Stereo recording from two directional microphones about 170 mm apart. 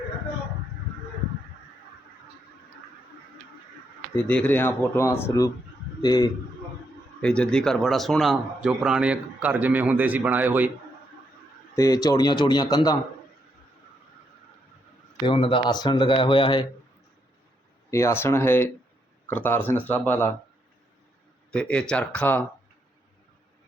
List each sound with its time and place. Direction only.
4.1 s speech: 10° left (ahead or behind)
7.2 s speech: 5° left (ahead or behind); by 10.7 s 10° right (ahead or behind)
11.7 s speech: 20° left (ahead or behind)
15.3 s speech: 30° left (ahead or behind)
17.9 s speech: 15° left (ahead or behind)
21.5 s speech: 5° left (ahead or behind)